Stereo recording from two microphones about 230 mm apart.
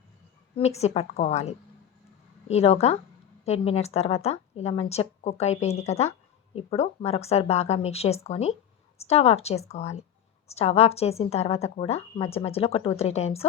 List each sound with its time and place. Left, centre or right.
0.5 s speech: left